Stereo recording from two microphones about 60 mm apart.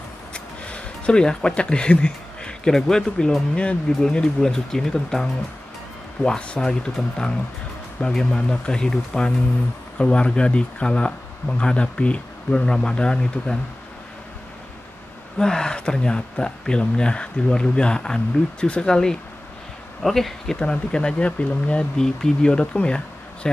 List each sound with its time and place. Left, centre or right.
0.3 s speech: centre
15.3 s speech: centre